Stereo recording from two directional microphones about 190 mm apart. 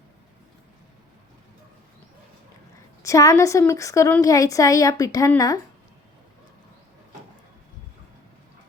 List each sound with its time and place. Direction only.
3.0 s speech: 15° left (ahead or behind)